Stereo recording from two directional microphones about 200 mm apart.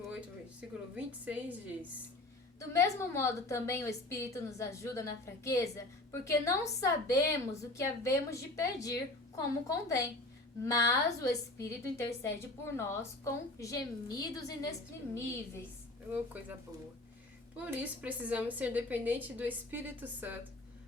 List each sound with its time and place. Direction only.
0.9 s a woman's voice: 5° right (ahead or behind)
2.6 s a woman's voice: 15° left (ahead or behind)
16.1 s a woman's voice: 10° right (ahead or behind)
17.6 s a woman's voice: 5° right (ahead or behind)